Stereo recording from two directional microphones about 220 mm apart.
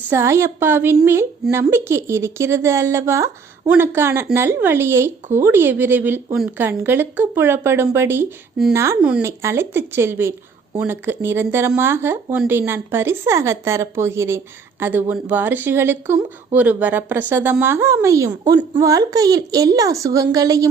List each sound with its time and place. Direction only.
0.1 s speech: 10° right (ahead or behind)